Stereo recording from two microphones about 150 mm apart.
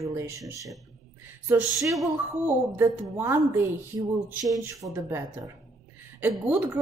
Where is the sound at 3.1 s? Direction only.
15° right (ahead or behind).